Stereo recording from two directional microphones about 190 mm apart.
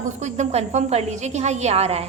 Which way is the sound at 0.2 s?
35° right (ahead or behind).